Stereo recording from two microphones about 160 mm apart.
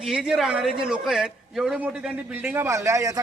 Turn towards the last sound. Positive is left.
turn(degrees=-20)  # may be behind; listen again after turning